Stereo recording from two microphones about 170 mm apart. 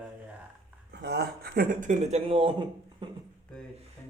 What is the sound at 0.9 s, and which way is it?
Speech, 80° right.